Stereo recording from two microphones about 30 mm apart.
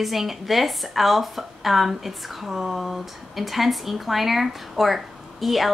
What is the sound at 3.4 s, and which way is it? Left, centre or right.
A woman's voice, centre.